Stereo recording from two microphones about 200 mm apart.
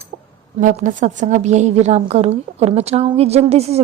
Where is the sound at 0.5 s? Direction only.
40° right (ahead or behind).